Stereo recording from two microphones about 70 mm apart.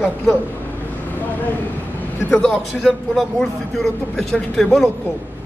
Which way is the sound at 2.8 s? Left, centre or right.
Centre.